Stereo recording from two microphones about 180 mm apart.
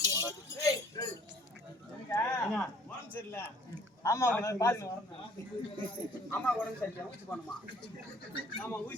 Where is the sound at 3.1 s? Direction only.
15° left (ahead or behind).